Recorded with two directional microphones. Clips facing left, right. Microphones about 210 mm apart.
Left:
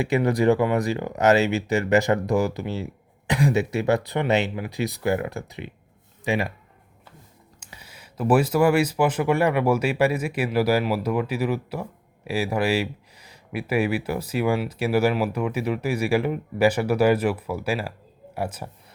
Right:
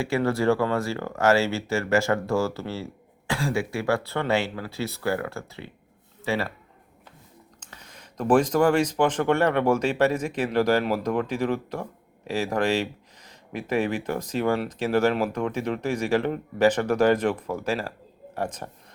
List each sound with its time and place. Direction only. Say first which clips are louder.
0.0 s speech: left 3 dB; 15° left (ahead or behind)
7.6 s speech: left 2 dB; 10° left (ahead or behind)